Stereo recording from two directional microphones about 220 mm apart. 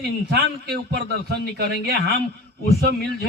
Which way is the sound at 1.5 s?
45° right (ahead or behind).